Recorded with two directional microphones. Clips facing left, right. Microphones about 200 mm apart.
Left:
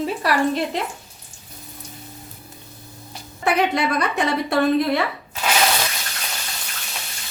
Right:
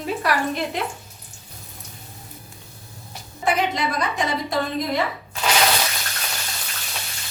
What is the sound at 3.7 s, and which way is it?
A woman's voice, 65° left (ahead or behind).